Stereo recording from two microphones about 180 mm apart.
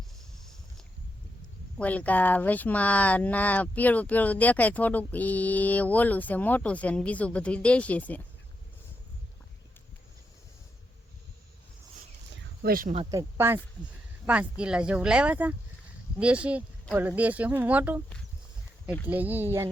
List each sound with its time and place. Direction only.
1.8 s speech: 10° left (ahead or behind)
12.6 s speech: 50° right (ahead or behind)
13.1 s speech: 15° right (ahead or behind)
19.0 s speech: 10° right (ahead or behind)